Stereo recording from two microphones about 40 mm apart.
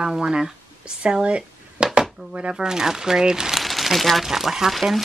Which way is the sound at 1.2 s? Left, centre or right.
Right.